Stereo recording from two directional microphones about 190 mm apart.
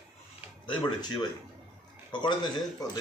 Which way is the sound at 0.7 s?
25° left (ahead or behind).